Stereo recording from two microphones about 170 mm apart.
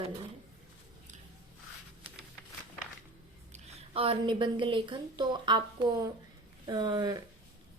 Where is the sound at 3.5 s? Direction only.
35° right (ahead or behind).